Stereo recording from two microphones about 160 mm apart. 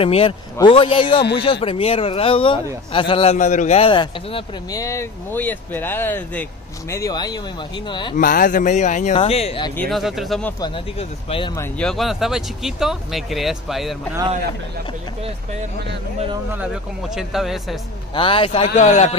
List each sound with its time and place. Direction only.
0.0 s speech: 35° left (ahead or behind)
3.3 s speech: 50° left (ahead or behind); by 4.5 s 30° left (ahead or behind)
4.7 s speech: 20° left (ahead or behind)
8.2 s speech: 60° left (ahead or behind); by 9.7 s 40° left (ahead or behind)
9.8 s speech: centre (ahead or behind)
11.0 s speech: 35° left (ahead or behind)
11.8 s speech: centre (ahead or behind)
16.5 s speech: 5° right (ahead or behind)
18.1 s speech: 35° left (ahead or behind); by 19.1 s 50° left (ahead or behind)